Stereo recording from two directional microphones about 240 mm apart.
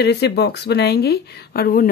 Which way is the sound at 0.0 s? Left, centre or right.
Left.